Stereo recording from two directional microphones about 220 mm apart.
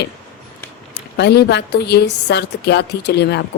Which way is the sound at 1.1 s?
50° left (ahead or behind).